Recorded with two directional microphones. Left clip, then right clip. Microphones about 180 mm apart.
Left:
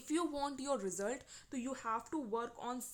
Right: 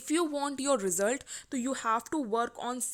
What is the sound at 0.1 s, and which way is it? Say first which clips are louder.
A woman's voice: right 7 dB; 25° right (ahead or behind).